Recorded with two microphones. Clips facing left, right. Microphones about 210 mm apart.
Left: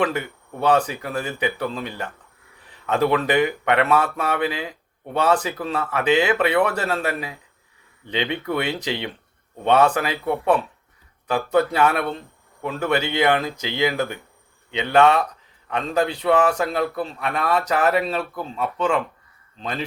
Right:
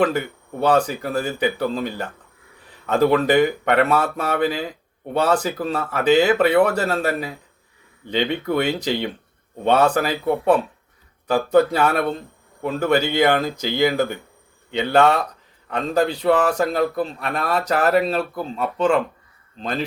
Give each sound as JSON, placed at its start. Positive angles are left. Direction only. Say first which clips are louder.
{"t": 0.6, "sound": "a man's voice", "louder": "right 1 dB", "side_deg": -40}